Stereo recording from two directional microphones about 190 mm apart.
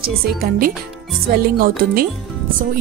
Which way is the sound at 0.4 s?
50° right (ahead or behind).